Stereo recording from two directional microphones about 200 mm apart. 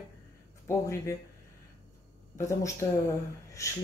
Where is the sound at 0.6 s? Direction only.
15° left (ahead or behind).